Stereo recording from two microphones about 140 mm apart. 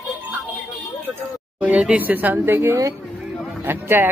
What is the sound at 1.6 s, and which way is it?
Speech, 5° right (ahead or behind).